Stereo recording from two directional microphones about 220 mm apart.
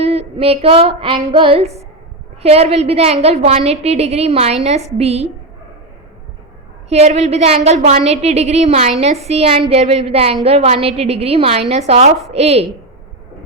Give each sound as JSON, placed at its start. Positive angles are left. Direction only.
{"t": 0.0, "sound": "a woman's voice", "side_deg": -30}
{"t": 6.9, "sound": "a woman's voice", "side_deg": -30}